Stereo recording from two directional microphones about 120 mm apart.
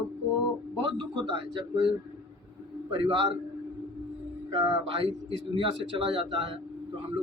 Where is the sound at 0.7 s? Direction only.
45° right (ahead or behind).